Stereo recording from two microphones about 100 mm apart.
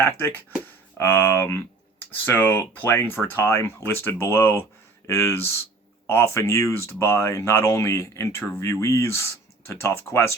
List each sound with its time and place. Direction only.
0.0 s speech: 20° left (ahead or behind)